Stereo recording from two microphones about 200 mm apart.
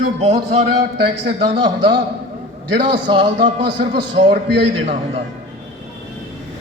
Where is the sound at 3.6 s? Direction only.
55° right (ahead or behind).